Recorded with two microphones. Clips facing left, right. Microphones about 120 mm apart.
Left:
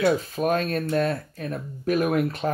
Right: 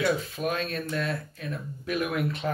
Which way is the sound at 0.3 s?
45° left (ahead or behind).